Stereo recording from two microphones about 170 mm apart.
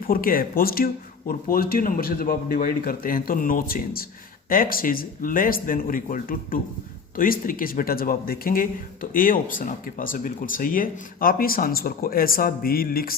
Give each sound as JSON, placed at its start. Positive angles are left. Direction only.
{"t": 0.1, "sound": "speech", "side_deg": 55}